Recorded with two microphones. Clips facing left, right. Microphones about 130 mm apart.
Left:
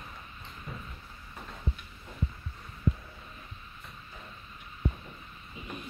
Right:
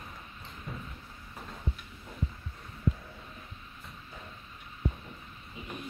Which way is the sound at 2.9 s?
Centre (ahead or behind).